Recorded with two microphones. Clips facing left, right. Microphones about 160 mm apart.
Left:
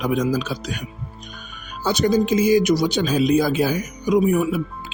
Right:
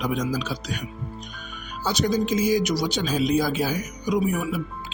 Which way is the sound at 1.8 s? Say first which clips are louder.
Left 5 dB; 55° left (ahead or behind).